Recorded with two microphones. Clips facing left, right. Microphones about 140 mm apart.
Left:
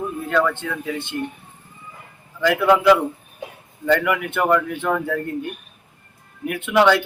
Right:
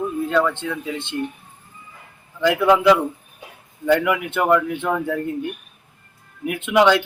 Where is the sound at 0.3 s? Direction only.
15° right (ahead or behind).